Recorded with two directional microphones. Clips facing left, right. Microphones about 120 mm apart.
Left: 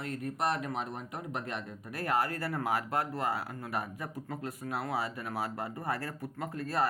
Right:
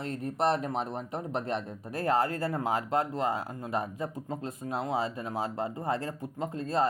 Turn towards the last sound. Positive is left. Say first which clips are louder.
# right 3 dB
turn(degrees=-25)  # may be behind; listen again after turning